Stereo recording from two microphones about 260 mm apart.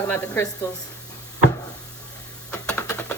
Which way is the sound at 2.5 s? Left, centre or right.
Centre.